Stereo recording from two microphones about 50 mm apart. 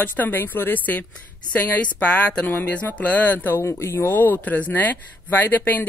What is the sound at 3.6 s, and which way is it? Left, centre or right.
Speech, left.